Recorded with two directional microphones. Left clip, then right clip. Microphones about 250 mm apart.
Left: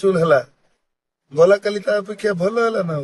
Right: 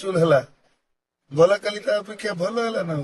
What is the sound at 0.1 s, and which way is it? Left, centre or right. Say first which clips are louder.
A man's voice: even; centre.